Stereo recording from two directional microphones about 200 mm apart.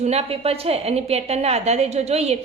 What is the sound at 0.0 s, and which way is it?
A woman's voice, 30° right (ahead or behind).